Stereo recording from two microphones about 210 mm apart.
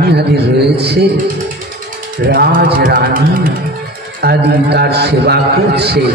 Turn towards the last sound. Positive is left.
turn(degrees=-50)  # may be behind; listen again after turning